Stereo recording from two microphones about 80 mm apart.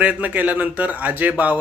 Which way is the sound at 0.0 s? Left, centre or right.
Centre.